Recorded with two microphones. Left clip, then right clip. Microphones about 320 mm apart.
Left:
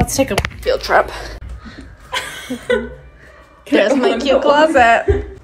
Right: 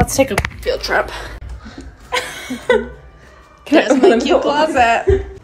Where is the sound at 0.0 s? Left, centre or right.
Centre.